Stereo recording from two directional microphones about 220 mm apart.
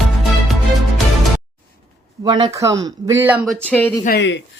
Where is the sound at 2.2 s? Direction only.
20° right (ahead or behind).